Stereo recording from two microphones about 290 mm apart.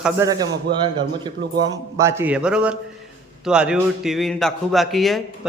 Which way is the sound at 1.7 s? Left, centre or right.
Centre.